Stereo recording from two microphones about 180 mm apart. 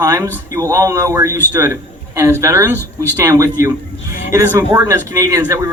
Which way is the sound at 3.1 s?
15° right (ahead or behind).